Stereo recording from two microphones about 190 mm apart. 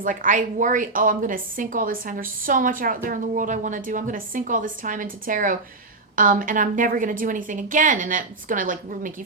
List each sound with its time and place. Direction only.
0.0 s a woman's voice: 45° right (ahead or behind)